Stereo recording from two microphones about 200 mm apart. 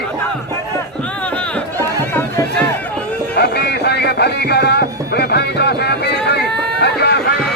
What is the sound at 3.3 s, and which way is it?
Music, 55° left (ahead or behind).